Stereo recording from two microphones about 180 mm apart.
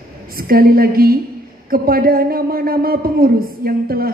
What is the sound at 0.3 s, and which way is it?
Speech, 55° right (ahead or behind).